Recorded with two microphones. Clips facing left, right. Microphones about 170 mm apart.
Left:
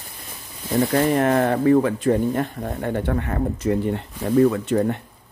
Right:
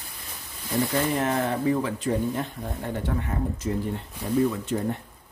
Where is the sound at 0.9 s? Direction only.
60° left (ahead or behind).